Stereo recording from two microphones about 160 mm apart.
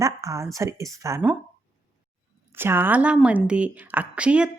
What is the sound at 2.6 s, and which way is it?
A woman's voice, 15° right (ahead or behind).